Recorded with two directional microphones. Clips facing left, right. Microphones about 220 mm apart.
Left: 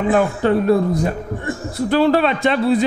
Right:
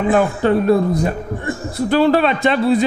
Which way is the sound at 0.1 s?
20° right (ahead or behind).